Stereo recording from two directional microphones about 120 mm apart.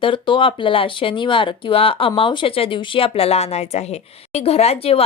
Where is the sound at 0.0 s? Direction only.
45° left (ahead or behind).